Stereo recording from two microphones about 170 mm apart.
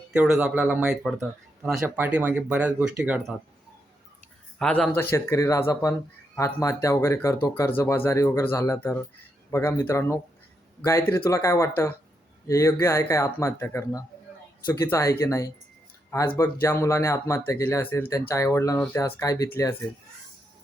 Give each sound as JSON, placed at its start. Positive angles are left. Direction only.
{"t": 0.1, "sound": "speech", "side_deg": -5}
{"t": 1.8, "sound": "speech", "side_deg": -10}
{"t": 4.5, "sound": "speech", "side_deg": 5}